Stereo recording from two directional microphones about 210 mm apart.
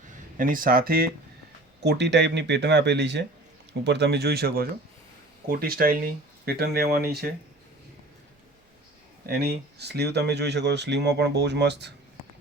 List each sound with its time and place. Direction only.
0.1 s speech: 40° right (ahead or behind)
9.2 s speech: 50° right (ahead or behind)